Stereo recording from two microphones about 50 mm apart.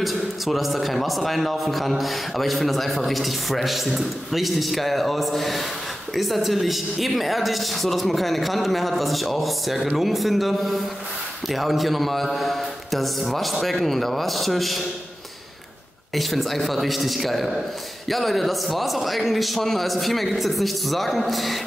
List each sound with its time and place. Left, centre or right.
0.0 s a man's voice: centre
16.2 s a man's voice: centre